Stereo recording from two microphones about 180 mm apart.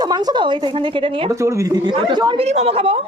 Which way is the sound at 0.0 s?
20° right (ahead or behind).